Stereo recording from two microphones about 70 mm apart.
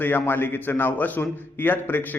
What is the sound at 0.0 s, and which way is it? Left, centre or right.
A man's voice, left.